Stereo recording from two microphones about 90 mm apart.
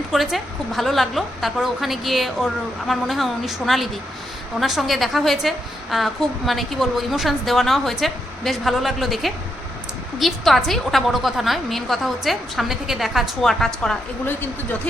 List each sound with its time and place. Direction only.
0.1 s a woman's voice: centre (ahead or behind)
14.3 s speech: 20° left (ahead or behind)